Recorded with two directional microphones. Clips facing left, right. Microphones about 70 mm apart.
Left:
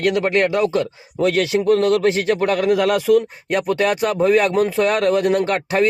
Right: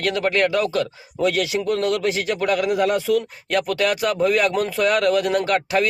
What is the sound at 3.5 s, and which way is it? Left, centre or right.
Speech, left.